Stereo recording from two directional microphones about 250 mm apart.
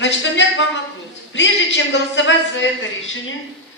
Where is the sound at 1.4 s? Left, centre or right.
Left.